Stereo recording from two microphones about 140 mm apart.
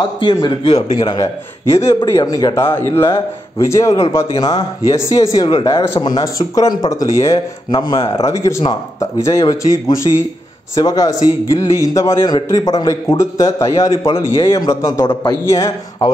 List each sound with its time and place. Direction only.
0.2 s a man's voice: 35° left (ahead or behind)
8.3 s a man's voice: 20° left (ahead or behind)